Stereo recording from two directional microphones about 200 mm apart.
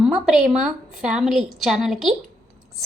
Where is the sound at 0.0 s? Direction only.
Centre (ahead or behind).